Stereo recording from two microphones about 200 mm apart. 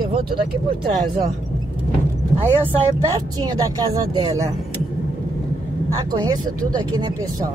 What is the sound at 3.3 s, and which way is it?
Speech, 20° right (ahead or behind).